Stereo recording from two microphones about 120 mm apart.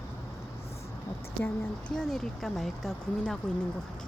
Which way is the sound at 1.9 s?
5° left (ahead or behind).